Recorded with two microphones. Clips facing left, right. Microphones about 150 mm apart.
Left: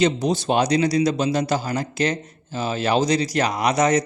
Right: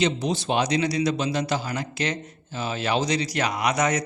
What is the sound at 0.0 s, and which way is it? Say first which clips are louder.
Speech: left 4 dB; 40° left (ahead or behind).